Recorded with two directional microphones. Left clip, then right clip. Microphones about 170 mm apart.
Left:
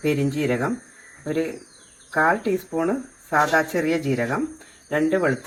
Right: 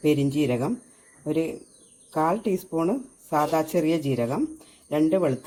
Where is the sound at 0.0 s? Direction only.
90° right.